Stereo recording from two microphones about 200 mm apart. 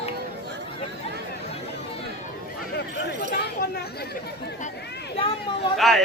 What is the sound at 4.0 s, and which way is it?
Speech, 50° left (ahead or behind).